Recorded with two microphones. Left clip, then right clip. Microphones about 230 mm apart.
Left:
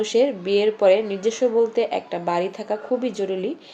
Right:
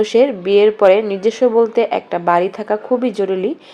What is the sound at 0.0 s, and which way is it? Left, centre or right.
Speech, right.